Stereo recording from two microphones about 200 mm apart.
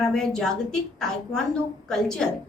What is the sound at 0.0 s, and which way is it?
A woman's voice, centre (ahead or behind).